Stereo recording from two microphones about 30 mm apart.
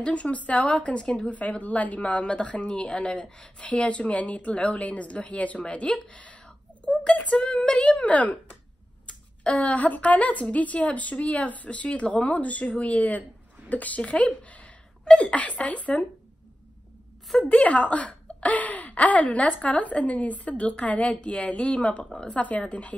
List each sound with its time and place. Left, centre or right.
0.0 s speech: left
1.3 s speech: left
3.5 s a woman's voice: left
5.6 s speech: left
6.8 s a sound: left
7.2 s a woman's voice: left
7.5 s speech: left
8.0 s a woman's voice: left
9.0 s a woman's voice: left
14.0 s speech: left
15.0 s speech: left
15.3 s a woman's voice: left
17.4 s a woman's voice: left